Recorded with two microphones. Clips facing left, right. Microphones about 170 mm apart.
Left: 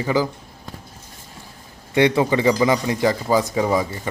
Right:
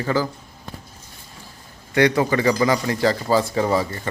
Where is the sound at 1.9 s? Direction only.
20° left (ahead or behind).